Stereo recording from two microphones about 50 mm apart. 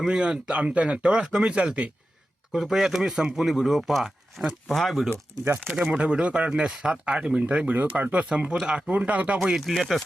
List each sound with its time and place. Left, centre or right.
0.0 s speech: centre
2.5 s speech: centre
5.6 s speech: right
9.6 s speech: centre